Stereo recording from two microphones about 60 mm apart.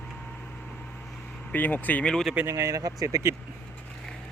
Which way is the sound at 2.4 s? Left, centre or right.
Right.